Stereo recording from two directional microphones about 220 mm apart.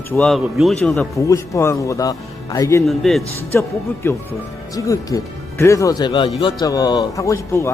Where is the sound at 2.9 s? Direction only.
Centre (ahead or behind).